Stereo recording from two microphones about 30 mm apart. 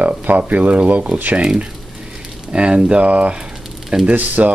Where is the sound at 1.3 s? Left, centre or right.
Right.